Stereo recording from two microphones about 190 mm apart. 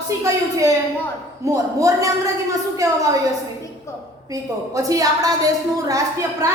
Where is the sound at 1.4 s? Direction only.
15° right (ahead or behind).